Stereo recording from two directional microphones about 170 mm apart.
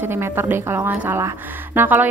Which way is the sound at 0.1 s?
15° right (ahead or behind).